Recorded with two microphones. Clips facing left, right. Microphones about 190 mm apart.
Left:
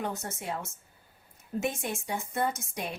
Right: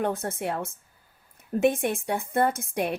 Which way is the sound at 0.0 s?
55° right (ahead or behind).